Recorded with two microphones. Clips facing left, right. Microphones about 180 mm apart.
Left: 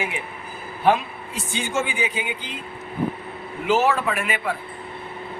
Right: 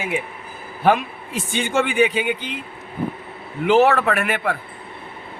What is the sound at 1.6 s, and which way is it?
Speech, 65° right (ahead or behind).